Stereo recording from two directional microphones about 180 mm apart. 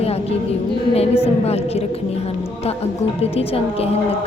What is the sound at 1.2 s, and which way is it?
Speech, 35° left (ahead or behind).